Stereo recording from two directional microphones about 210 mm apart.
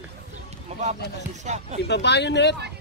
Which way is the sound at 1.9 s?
55° left (ahead or behind).